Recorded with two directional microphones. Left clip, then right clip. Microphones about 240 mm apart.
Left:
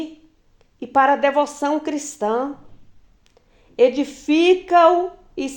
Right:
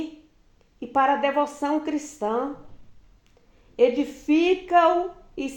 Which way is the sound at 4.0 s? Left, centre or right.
Left.